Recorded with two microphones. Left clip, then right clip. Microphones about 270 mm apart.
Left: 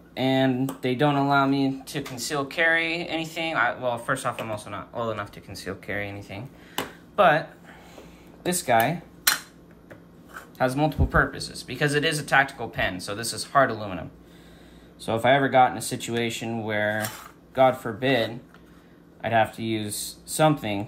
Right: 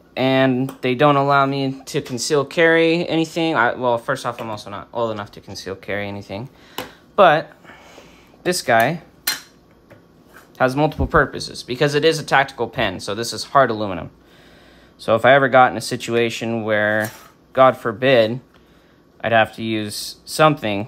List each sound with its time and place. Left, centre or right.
0.1 s speech: right
10.6 s speech: right